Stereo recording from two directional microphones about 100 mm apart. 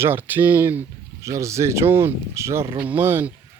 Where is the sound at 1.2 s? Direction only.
30° right (ahead or behind).